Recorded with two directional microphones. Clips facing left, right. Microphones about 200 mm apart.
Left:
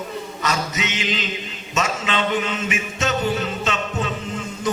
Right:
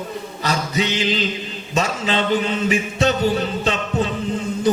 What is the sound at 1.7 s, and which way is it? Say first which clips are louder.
Mantra: right 2 dB; 35° right (ahead or behind).